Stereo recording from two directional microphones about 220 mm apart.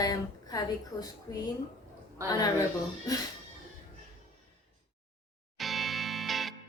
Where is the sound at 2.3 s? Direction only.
15° left (ahead or behind).